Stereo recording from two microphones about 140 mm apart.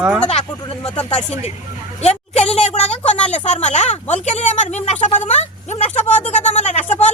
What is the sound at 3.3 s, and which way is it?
A child's voice, 55° left (ahead or behind).